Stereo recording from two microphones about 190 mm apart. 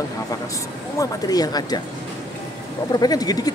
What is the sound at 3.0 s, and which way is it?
Speech, 20° left (ahead or behind).